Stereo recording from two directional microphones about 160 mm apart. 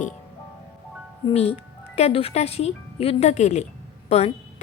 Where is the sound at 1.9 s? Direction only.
40° left (ahead or behind).